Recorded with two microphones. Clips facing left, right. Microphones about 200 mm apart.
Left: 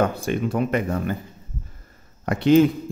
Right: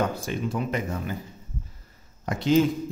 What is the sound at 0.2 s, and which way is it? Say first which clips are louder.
Speech: left 6 dB; 60° left (ahead or behind).